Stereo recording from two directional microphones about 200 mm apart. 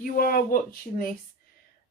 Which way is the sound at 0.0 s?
45° left (ahead or behind).